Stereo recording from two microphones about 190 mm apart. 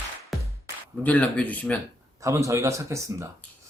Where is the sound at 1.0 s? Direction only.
10° left (ahead or behind).